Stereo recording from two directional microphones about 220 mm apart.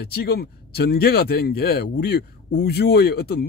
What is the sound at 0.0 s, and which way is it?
Speech, 45° left (ahead or behind).